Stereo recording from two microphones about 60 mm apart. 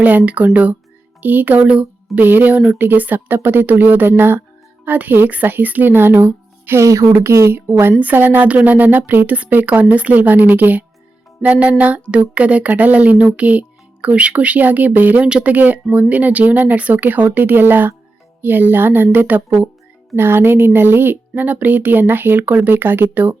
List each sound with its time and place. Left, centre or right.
0.0 s speech: right
2.2 s speech: right
7.1 s speech: right
8.0 s speech: right
15.3 s speech: centre
15.5 s speech: right